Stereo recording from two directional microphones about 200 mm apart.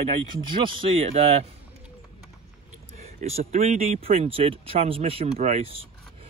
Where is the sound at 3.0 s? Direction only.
30° right (ahead or behind).